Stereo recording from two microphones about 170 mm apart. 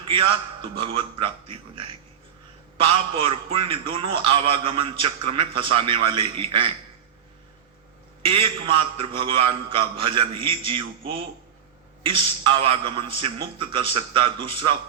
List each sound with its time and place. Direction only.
0.1 s a man's voice: 30° right (ahead or behind)
8.3 s a man's voice: 30° right (ahead or behind)